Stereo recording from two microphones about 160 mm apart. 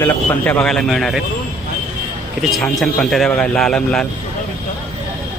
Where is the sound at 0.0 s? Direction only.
15° left (ahead or behind).